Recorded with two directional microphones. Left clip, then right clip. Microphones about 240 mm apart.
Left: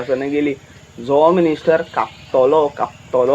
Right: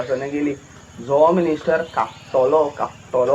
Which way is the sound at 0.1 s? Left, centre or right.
Left.